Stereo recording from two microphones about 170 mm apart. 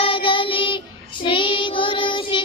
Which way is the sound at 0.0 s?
30° left (ahead or behind).